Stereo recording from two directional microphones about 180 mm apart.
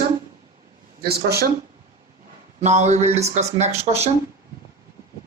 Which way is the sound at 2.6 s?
40° right (ahead or behind).